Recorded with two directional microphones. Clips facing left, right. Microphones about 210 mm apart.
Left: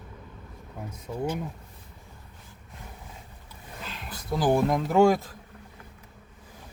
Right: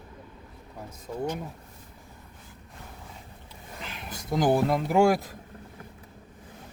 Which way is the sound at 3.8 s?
20° right (ahead or behind).